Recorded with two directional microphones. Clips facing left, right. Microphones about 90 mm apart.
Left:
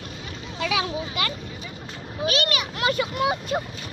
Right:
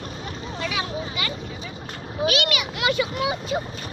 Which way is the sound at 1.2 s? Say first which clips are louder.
Left 4 dB; 60° left (ahead or behind).